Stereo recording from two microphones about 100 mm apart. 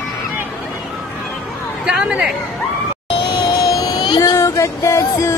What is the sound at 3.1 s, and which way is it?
Music, 55° left (ahead or behind).